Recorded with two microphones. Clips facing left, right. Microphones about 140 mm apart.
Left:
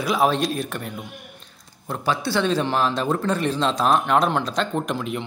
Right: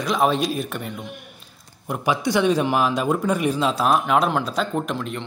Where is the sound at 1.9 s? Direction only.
15° right (ahead or behind).